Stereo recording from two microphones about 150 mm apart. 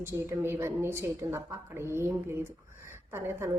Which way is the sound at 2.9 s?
15° right (ahead or behind).